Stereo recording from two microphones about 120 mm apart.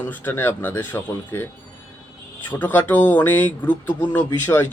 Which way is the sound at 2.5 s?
15° left (ahead or behind).